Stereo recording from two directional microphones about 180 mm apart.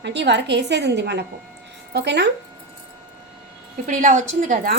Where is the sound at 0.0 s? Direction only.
70° right (ahead or behind).